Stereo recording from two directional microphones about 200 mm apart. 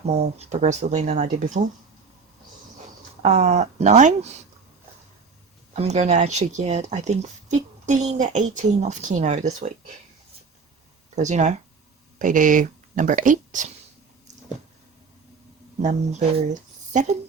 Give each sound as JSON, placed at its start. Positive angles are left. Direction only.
{"t": 0.0, "sound": "speech", "side_deg": -30}
{"t": 3.2, "sound": "speech", "side_deg": -35}
{"t": 5.7, "sound": "speech", "side_deg": -35}
{"t": 11.1, "sound": "speech", "side_deg": -35}
{"t": 15.8, "sound": "speech", "side_deg": -35}